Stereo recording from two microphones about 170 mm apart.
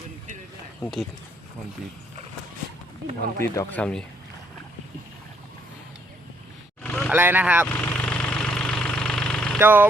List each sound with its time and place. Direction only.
0.8 s speech: 25° left (ahead or behind)
3.5 s speech: 20° left (ahead or behind)
3.8 s speech: 5° left (ahead or behind)
6.8 s vehicle: 5° left (ahead or behind)
7.1 s speech: 10° right (ahead or behind)
7.7 s vehicle: 10° left (ahead or behind)
9.6 s speech: 10° right (ahead or behind)